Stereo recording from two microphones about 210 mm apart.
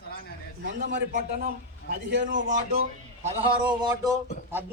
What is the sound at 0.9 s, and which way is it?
A man's voice, 50° right (ahead or behind).